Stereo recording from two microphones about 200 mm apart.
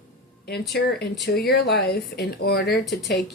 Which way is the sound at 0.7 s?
55° left (ahead or behind).